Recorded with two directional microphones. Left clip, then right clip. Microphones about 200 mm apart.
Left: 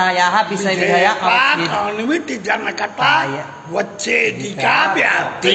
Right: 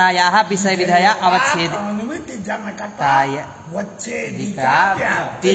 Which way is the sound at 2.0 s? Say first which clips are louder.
Left 7 dB; 50° left (ahead or behind).